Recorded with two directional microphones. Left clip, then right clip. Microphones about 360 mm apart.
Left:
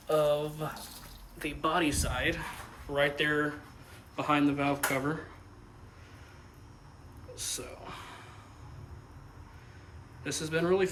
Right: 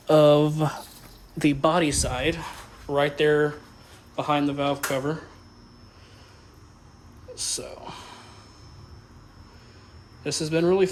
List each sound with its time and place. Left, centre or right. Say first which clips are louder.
0.1 s speech: right 10 dB; centre
7.3 s speech: right 7 dB; centre
10.2 s speech: right 7 dB; centre